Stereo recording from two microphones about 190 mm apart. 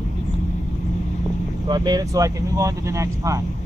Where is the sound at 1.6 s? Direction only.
20° right (ahead or behind).